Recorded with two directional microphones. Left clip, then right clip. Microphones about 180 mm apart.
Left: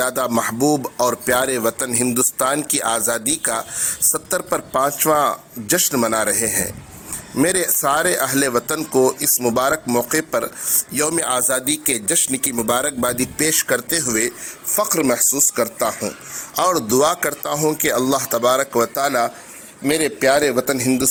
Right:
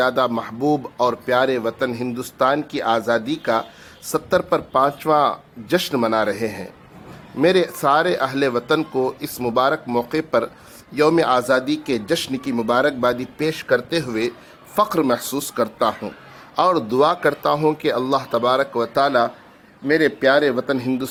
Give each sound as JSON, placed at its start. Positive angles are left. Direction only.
{"t": 0.0, "sound": "speech", "side_deg": 30}
{"t": 20.7, "sound": "speech", "side_deg": 0}